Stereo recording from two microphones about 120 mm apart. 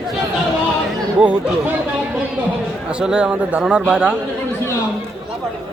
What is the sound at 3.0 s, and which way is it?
Speech, 5° right (ahead or behind).